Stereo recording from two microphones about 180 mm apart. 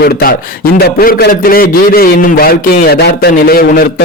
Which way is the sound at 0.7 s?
55° left (ahead or behind).